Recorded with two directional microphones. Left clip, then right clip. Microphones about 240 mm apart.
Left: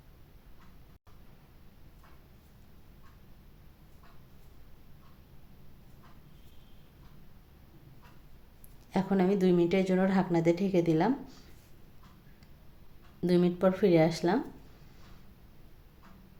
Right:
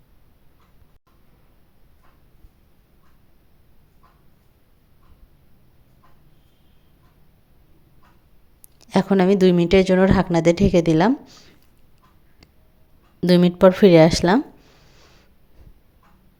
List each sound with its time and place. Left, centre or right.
8.8 s a woman's voice: right
13.2 s speech: right